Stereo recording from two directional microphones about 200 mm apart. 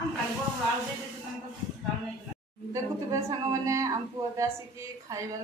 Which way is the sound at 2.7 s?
15° right (ahead or behind).